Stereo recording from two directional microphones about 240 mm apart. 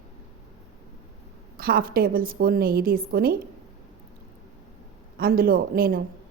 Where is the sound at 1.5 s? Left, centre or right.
Right.